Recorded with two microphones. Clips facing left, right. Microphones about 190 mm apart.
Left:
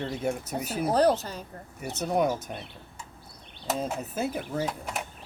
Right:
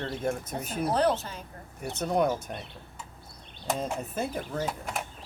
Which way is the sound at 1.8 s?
5° left (ahead or behind).